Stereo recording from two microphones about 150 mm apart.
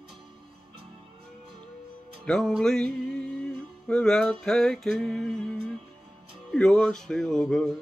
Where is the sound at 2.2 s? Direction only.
5° left (ahead or behind).